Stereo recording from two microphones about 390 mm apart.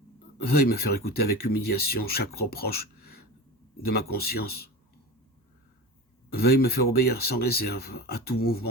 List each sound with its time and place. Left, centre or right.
0.4 s speech: left
3.0 s throat clearing: left
3.8 s speech: left
6.3 s speech: left